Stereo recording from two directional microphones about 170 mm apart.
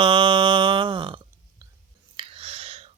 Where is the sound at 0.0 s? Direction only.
30° right (ahead or behind).